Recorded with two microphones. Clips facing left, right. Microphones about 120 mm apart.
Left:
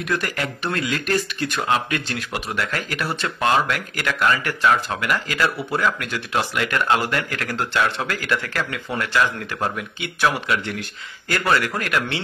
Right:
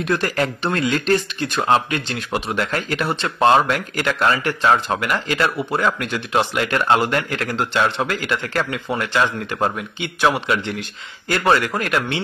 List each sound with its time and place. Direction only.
0.0 s speech: 30° right (ahead or behind)
11.2 s speech: 25° right (ahead or behind)